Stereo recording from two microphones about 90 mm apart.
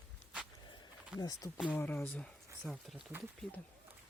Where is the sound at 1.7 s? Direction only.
20° left (ahead or behind); by 2.9 s 5° left (ahead or behind).